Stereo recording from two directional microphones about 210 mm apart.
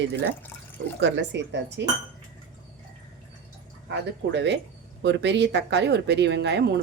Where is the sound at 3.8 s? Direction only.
55° right (ahead or behind).